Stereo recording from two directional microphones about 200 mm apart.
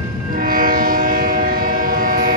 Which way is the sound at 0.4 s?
45° right (ahead or behind).